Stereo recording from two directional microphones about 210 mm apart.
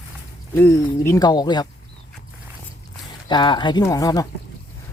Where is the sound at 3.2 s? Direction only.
20° left (ahead or behind).